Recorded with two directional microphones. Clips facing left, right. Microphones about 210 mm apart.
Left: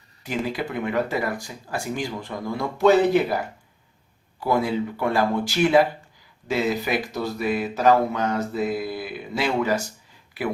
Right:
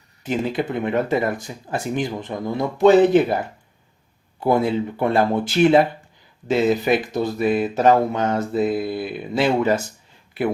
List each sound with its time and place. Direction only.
0.3 s speech: 25° right (ahead or behind)